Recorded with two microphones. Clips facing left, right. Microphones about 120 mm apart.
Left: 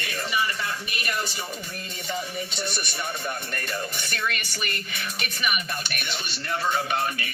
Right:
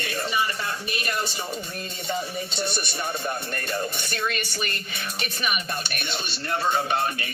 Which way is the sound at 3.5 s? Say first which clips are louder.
Right 3 dB; 30° right (ahead or behind).